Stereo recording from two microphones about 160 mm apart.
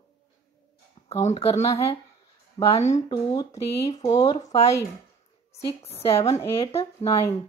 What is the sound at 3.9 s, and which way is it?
Speech, 45° left (ahead or behind).